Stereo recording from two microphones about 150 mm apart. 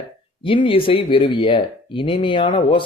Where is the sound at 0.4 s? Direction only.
35° left (ahead or behind).